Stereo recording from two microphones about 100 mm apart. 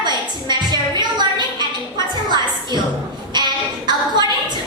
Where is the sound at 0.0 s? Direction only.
45° right (ahead or behind).